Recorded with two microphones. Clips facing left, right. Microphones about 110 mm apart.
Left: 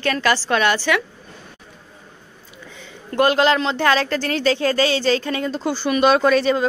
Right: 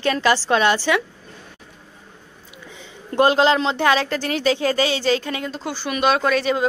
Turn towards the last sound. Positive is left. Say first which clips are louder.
# left 3 dB
turn(degrees=-5)  # may be behind; listen again after turning